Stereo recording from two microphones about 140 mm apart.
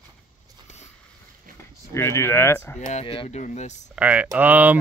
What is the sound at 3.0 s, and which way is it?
Speech, 40° left (ahead or behind).